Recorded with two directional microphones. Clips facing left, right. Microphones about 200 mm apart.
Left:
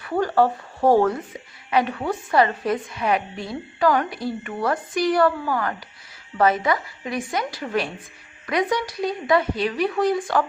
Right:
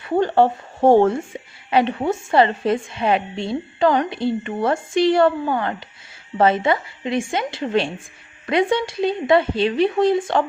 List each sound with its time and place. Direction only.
0.0 s a woman's voice: 25° right (ahead or behind)